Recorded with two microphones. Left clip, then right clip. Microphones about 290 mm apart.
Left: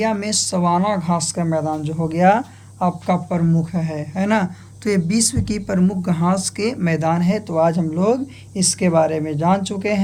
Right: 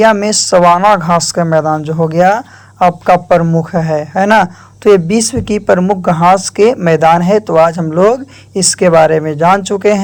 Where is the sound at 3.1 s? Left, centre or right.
Right.